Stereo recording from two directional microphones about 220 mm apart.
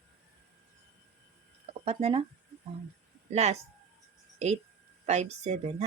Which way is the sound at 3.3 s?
30° right (ahead or behind).